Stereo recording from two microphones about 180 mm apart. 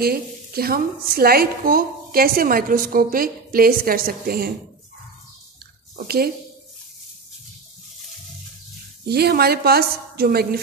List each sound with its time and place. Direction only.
0.0 s a woman's voice: 55° right (ahead or behind)
5.9 s a woman's voice: 60° right (ahead or behind)
9.0 s a woman's voice: 60° right (ahead or behind)